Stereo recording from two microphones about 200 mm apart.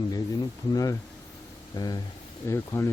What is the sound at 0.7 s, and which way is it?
Speech, 15° left (ahead or behind).